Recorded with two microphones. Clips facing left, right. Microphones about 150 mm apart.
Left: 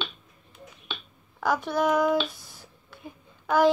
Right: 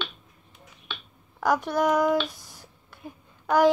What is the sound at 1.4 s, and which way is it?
Speech, 15° right (ahead or behind).